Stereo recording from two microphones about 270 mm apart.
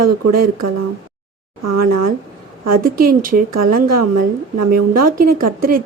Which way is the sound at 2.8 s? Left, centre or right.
Right.